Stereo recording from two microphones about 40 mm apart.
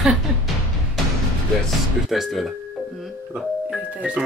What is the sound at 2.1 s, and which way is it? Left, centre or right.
Speech, centre.